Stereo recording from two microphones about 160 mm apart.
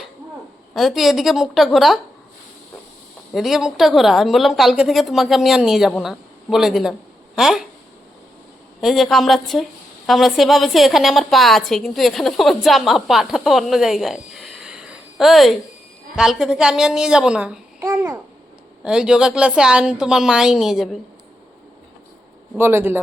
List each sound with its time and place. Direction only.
0.7 s a woman's voice: centre (ahead or behind)
3.3 s a woman's voice: centre (ahead or behind)
8.8 s a woman's voice: centre (ahead or behind)
17.8 s babbling: 20° right (ahead or behind)
18.9 s a woman's voice: 5° right (ahead or behind)
22.5 s speech: 15° right (ahead or behind)